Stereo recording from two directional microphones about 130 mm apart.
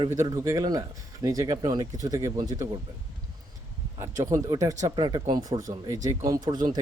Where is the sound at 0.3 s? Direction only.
25° right (ahead or behind).